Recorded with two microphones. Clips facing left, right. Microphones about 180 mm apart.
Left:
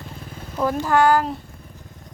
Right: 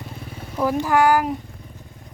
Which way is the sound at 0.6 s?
10° right (ahead or behind).